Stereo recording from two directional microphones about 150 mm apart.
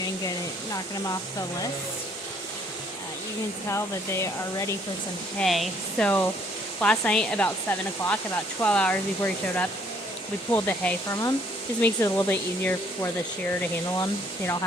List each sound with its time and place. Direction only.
0.0 s speech: 25° left (ahead or behind)
3.7 s speech: 20° left (ahead or behind)
5.4 s speech: 5° left (ahead or behind); by 14.6 s 25° left (ahead or behind)